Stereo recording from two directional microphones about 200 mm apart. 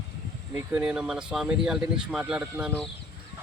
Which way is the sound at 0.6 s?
5° right (ahead or behind).